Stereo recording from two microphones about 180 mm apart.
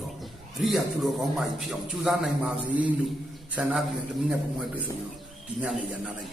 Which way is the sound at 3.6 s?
5° right (ahead or behind).